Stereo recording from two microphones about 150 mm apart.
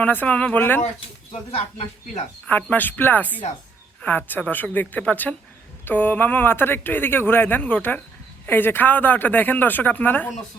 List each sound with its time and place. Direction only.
0.0 s speech: 10° left (ahead or behind)
1.5 s speech: 40° left (ahead or behind)
2.5 s speech: 10° left (ahead or behind)